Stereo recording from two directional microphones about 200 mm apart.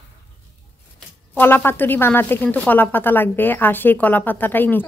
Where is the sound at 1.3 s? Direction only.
10° left (ahead or behind).